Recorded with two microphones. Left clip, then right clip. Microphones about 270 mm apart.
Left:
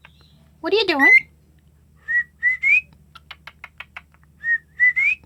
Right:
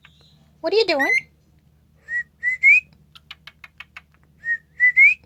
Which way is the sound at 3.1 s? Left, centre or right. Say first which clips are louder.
Left 1 dB; centre.